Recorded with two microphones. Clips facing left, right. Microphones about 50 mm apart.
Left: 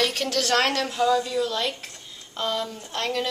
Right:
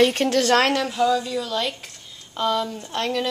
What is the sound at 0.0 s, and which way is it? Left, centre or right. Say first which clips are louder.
Speech: right 7 dB; right.